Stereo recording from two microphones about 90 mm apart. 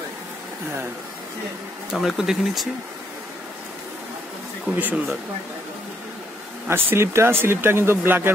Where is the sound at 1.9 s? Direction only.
5° right (ahead or behind).